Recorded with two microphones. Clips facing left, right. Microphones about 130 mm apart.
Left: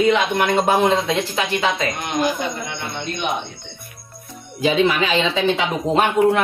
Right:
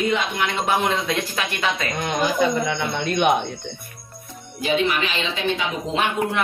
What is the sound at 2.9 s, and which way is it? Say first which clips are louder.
Speech: right 6 dB; 65° right (ahead or behind).